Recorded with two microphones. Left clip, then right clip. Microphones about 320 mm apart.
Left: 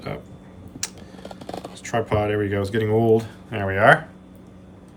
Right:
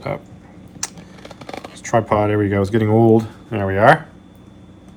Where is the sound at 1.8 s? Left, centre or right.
Centre.